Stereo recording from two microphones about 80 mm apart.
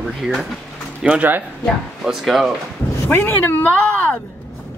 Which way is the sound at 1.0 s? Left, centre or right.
Centre.